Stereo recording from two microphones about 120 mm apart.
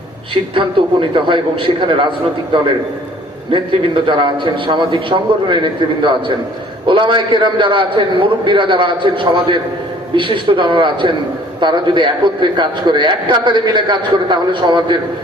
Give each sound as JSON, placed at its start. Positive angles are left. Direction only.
{"t": 0.5, "sound": "a man's voice", "side_deg": -45}
{"t": 3.5, "sound": "a man's voice", "side_deg": -45}